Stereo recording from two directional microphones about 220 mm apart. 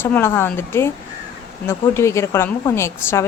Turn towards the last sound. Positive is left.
turn(degrees=10)  # may be behind; listen again after turning